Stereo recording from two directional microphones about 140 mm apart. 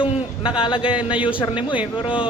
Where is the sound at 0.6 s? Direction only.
35° left (ahead or behind).